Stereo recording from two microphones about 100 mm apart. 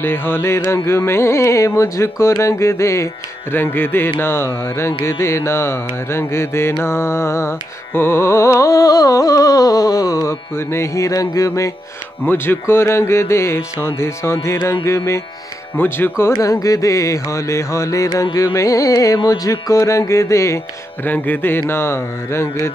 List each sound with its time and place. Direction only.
0.0 s music: 20° left (ahead or behind)
10.5 s music: 25° left (ahead or behind)
16.5 s music: 35° left (ahead or behind)
21.0 s music: 20° left (ahead or behind)